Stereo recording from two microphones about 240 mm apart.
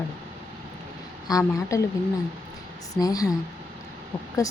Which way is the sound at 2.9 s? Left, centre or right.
Centre.